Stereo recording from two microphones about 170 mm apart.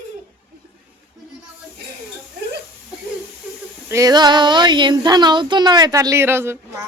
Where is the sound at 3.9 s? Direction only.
20° right (ahead or behind).